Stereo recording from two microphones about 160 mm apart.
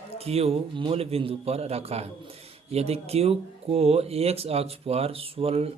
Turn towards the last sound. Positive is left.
turn(degrees=-40)  # may be behind; listen again after turning